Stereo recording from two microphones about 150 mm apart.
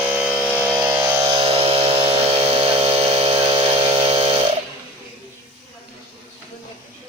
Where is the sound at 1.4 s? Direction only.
40° right (ahead or behind).